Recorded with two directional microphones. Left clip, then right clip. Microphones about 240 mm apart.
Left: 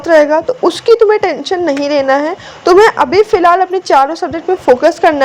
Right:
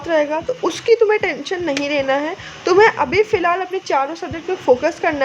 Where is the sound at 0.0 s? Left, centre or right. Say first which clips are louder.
Left 10 dB; left.